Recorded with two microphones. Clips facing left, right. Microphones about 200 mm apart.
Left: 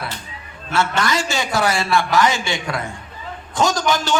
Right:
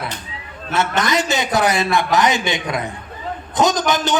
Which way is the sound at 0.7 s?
20° right (ahead or behind).